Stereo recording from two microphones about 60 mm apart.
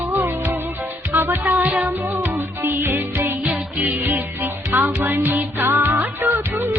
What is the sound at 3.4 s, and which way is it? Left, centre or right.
Music, right.